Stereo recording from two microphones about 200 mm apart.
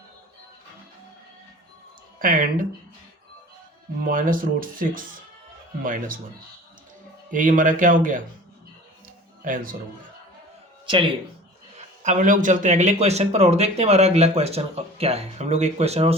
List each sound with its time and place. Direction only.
2.1 s speech: 45° right (ahead or behind)
4.0 s speech: 45° right (ahead or behind)
7.3 s speech: 40° right (ahead or behind)
9.4 s speech: 45° right (ahead or behind)
12.0 s speech: 40° right (ahead or behind)